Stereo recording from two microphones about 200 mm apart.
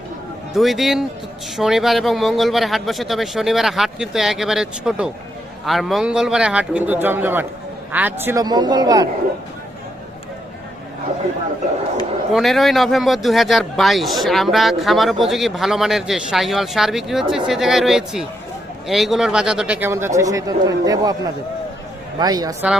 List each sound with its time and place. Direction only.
0.5 s a man's voice: centre (ahead or behind); by 9.0 s 20° right (ahead or behind)
12.3 s speech: centre (ahead or behind); by 21.2 s 20° right (ahead or behind)
22.2 s a man's voice: 20° right (ahead or behind)